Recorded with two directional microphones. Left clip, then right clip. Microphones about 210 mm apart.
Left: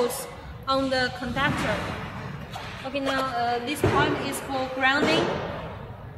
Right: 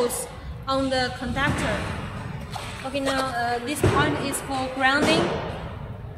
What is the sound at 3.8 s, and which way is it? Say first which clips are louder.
Speech: right 1 dB; 55° right (ahead or behind).